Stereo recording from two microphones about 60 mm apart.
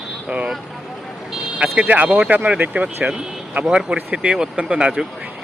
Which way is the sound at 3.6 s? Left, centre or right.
Centre.